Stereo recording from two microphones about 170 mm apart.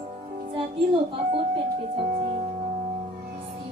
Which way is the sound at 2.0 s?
45° right (ahead or behind).